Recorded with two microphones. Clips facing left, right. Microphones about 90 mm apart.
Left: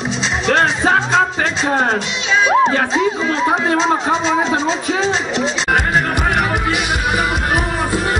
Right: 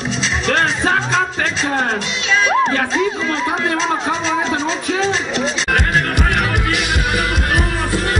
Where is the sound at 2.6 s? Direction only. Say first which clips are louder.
Left 2 dB; 15° left (ahead or behind).